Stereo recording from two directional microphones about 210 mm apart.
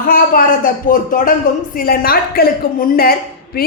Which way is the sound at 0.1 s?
40° left (ahead or behind).